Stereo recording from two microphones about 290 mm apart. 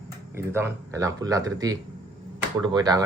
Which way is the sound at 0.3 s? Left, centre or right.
Centre.